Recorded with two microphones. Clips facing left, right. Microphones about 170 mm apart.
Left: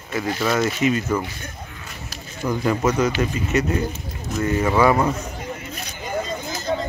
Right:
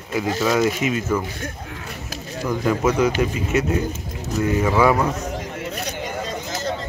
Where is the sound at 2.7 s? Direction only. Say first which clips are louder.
Right 2 dB; 10° right (ahead or behind).